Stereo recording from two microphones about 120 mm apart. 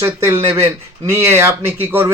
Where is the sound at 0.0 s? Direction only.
20° right (ahead or behind).